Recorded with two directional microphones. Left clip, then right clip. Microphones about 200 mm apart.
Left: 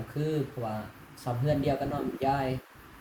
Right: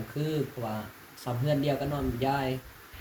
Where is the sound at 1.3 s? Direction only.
15° left (ahead or behind).